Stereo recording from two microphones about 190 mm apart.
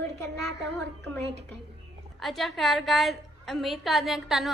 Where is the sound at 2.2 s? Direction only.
Centre (ahead or behind).